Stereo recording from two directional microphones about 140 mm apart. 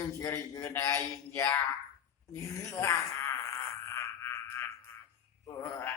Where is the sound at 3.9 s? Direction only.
15° left (ahead or behind).